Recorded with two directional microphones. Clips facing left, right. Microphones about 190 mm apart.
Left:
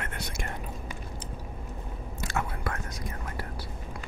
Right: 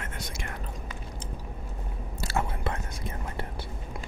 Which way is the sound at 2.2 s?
30° right (ahead or behind).